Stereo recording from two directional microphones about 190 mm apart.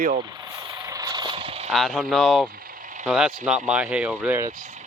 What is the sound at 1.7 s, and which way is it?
Speech, centre (ahead or behind).